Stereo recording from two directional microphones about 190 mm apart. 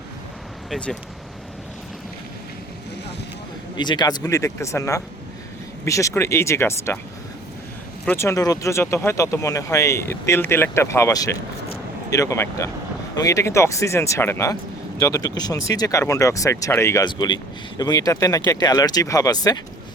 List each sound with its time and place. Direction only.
0.7 s speech: 5° left (ahead or behind)
3.8 s speech: 25° left (ahead or behind)
8.0 s speech: 15° left (ahead or behind)